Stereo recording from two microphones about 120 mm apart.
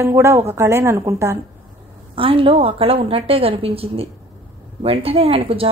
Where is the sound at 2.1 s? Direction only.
50° right (ahead or behind).